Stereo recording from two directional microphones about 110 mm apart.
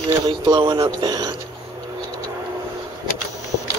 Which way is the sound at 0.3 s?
45° right (ahead or behind).